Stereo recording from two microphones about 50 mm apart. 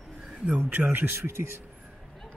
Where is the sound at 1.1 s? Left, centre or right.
Right.